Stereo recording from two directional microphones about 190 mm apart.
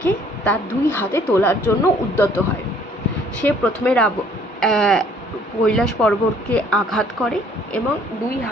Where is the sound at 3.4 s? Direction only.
5° left (ahead or behind).